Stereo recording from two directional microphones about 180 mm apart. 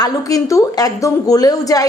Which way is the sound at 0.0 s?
20° left (ahead or behind).